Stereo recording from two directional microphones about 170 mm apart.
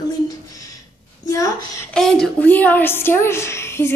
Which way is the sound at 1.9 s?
5° left (ahead or behind).